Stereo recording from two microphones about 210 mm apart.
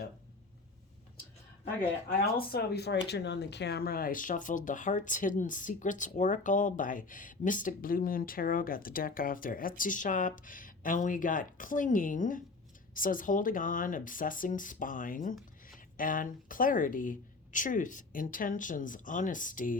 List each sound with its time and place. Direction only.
2.0 s speech: 50° left (ahead or behind)